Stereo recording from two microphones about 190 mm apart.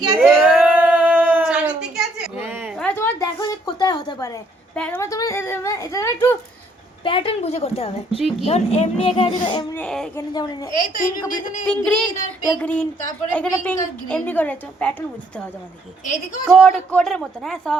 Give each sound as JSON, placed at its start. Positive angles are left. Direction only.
{"t": 0.0, "sound": "a sound", "side_deg": -10}
{"t": 2.7, "sound": "a sound", "side_deg": 10}
{"t": 4.7, "sound": "a woman's voice", "side_deg": 5}
{"t": 7.0, "sound": "a woman's voice", "side_deg": 30}
{"t": 9.7, "sound": "a man's voice", "side_deg": 5}
{"t": 10.2, "sound": "speech", "side_deg": 20}
{"t": 11.7, "sound": "a man's voice", "side_deg": 5}
{"t": 16.0, "sound": "a woman's voice", "side_deg": 40}
{"t": 16.5, "sound": "a man's voice", "side_deg": 0}